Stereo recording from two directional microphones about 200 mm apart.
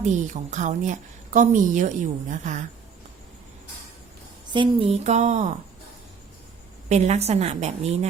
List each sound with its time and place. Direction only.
0.0 s a woman's voice: 40° right (ahead or behind)
4.5 s a woman's voice: 25° right (ahead or behind)
6.8 s a woman's voice: 35° right (ahead or behind)